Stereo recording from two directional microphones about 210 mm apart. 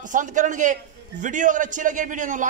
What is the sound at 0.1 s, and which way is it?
A man's voice, 40° right (ahead or behind).